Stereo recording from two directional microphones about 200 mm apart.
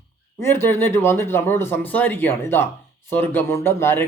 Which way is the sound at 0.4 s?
10° left (ahead or behind).